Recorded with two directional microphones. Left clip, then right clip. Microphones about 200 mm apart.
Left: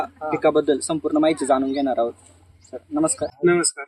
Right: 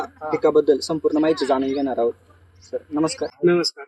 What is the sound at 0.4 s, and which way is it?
A man's voice, 10° left (ahead or behind).